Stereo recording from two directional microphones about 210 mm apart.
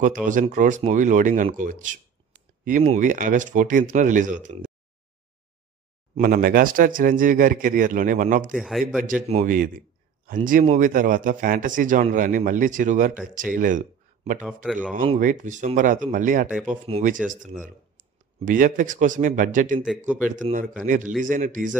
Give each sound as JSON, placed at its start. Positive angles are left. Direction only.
{"t": 0.0, "sound": "a man's voice", "side_deg": -40}
{"t": 6.1, "sound": "a man's voice", "side_deg": -45}
{"t": 8.5, "sound": "speech", "side_deg": 0}
{"t": 9.0, "sound": "a man's voice", "side_deg": -35}
{"t": 14.4, "sound": "speech", "side_deg": -5}
{"t": 15.1, "sound": "a man's voice", "side_deg": -40}